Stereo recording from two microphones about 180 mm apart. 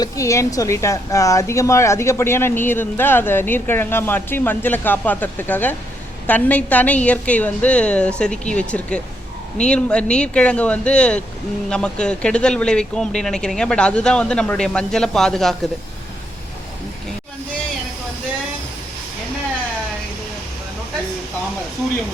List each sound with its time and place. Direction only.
0.0 s a woman's voice: 15° left (ahead or behind)